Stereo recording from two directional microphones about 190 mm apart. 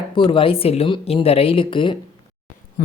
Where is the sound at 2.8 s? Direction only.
45° left (ahead or behind).